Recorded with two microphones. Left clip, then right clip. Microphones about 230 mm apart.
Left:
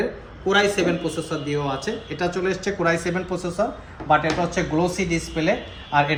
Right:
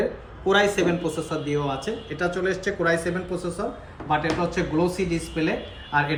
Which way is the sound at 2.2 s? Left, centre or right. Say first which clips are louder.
Left 1 dB; left.